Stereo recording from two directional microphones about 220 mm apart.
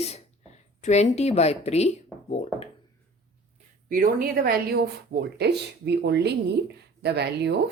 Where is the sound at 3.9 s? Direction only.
40° right (ahead or behind).